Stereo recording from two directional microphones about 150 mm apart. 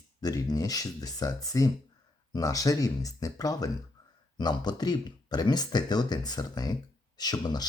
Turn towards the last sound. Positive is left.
turn(degrees=25)  # may be behind; listen again after turning